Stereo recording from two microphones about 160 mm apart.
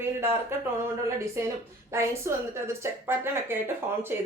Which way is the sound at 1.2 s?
15° right (ahead or behind).